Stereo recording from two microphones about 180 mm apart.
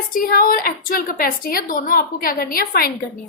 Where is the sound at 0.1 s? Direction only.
50° left (ahead or behind).